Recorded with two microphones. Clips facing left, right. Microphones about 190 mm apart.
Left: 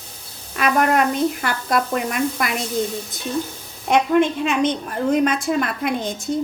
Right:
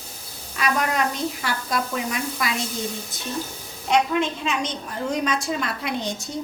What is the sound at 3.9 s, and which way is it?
A woman's voice, 55° left (ahead or behind).